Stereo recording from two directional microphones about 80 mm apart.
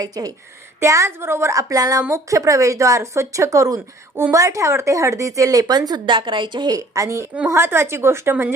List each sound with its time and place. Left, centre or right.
0.0 s speech: right
0.8 s a woman's voice: right
6.7 s speech: right
7.4 s a woman's voice: right